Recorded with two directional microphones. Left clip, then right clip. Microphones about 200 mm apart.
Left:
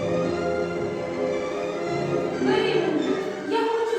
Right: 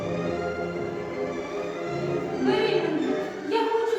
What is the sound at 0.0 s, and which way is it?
Music, 40° left (ahead or behind).